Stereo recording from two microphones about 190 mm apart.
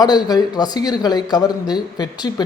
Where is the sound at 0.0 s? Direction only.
20° left (ahead or behind).